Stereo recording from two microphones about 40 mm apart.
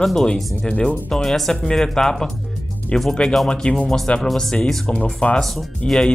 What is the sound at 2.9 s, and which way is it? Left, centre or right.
Speech, left.